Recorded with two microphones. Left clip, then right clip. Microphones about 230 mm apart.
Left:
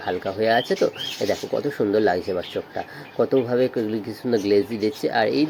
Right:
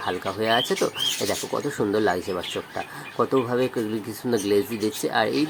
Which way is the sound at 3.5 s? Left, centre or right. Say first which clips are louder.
Left 3 dB; centre.